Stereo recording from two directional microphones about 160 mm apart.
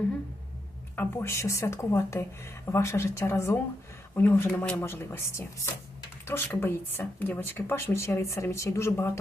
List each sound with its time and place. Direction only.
0.9 s speech: 15° left (ahead or behind)
6.2 s speech: 15° left (ahead or behind)